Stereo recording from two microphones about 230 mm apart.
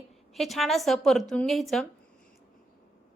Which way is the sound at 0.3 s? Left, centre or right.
Centre.